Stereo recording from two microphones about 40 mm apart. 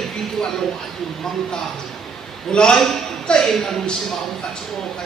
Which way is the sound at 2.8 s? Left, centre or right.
Centre.